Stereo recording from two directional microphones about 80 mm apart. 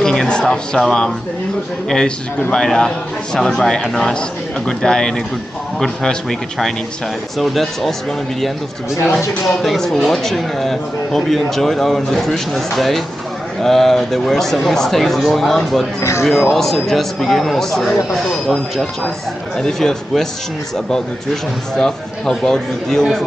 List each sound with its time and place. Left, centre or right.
0.0 s a sound: centre
1.9 s speech: centre
7.3 s speech: centre
9.0 s speech: centre
16.0 s speech: left
16.3 s speech: centre
21.7 s speech: centre